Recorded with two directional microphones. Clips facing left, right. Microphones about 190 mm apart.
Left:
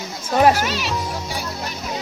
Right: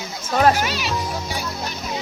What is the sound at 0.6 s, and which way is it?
Speech, centre (ahead or behind).